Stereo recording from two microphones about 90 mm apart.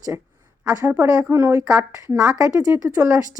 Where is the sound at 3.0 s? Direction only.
25° right (ahead or behind).